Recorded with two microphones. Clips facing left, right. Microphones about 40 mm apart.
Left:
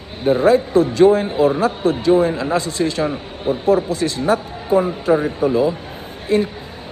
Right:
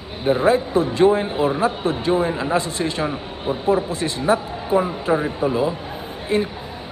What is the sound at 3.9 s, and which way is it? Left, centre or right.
Speech, right.